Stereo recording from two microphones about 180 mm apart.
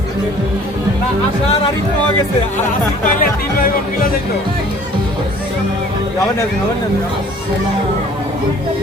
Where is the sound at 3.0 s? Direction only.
50° left (ahead or behind).